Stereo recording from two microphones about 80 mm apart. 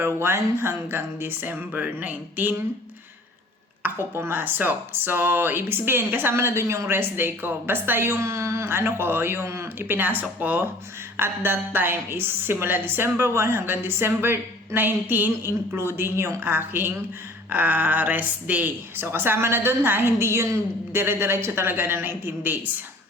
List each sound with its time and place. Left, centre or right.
0.0 s speech: right
4.1 s speech: right